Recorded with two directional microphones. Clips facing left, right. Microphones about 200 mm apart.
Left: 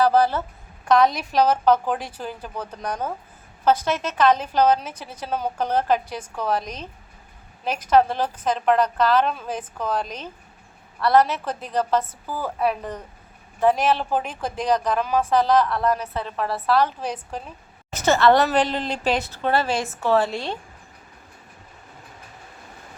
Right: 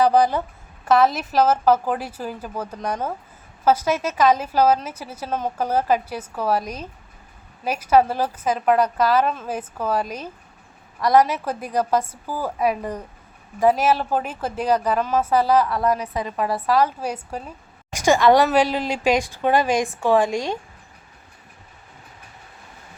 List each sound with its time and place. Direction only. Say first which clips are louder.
0.0 s a woman's voice: right 1 dB; 15° right (ahead or behind)
0.9 s a woman's voice: right 1 dB; 5° right (ahead or behind)